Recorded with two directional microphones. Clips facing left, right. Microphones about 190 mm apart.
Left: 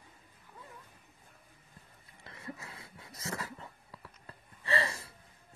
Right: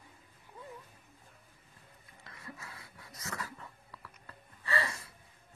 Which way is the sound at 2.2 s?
25° left (ahead or behind).